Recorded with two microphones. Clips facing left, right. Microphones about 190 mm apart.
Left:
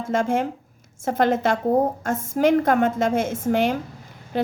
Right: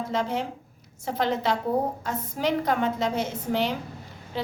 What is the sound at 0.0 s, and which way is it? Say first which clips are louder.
A woman's voice: left 6 dB; 50° left (ahead or behind).